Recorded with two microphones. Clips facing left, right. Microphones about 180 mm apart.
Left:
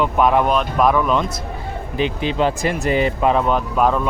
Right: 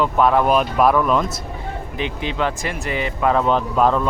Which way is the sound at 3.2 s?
15° left (ahead or behind).